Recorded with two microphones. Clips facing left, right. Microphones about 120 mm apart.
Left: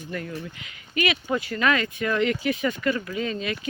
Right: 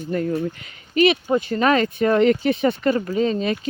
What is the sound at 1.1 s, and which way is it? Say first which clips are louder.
Speech: right 4 dB; 30° right (ahead or behind).